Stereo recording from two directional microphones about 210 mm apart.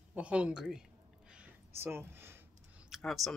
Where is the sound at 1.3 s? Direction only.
10° right (ahead or behind).